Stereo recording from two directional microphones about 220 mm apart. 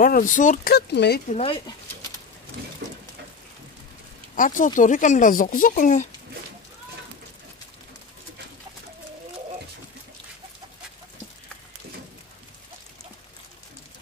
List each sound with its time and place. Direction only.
0.0 s speech: 35° left (ahead or behind)
1.3 s speech: 25° left (ahead or behind)
4.4 s speech: 35° left (ahead or behind)